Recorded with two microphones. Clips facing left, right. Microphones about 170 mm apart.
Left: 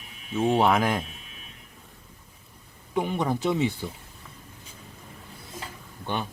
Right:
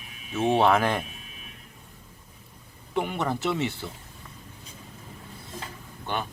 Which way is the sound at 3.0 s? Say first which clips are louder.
Left 1 dB; 15° left (ahead or behind).